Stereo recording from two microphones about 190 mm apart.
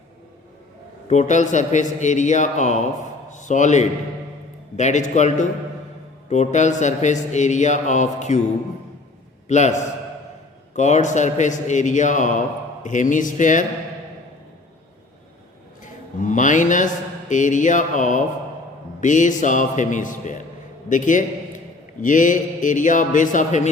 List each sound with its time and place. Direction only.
1.0 s a man's voice: 40° left (ahead or behind)
3.2 s a sound: 40° left (ahead or behind)
4.8 s a man's voice: 40° left (ahead or behind)
9.5 s a man's voice: 40° left (ahead or behind)
15.8 s mantra: 40° left (ahead or behind)
18.9 s a man's voice: 40° left (ahead or behind)